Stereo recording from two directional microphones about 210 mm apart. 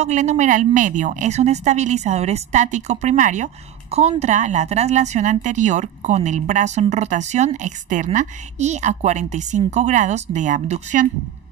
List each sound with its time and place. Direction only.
0.0 s a woman's voice: 35° right (ahead or behind)